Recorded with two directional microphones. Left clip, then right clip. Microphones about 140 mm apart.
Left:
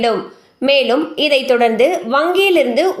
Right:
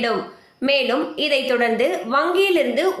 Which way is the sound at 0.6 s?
45° left (ahead or behind).